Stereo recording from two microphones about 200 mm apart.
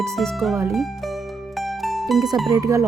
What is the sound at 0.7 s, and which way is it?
Music, centre (ahead or behind).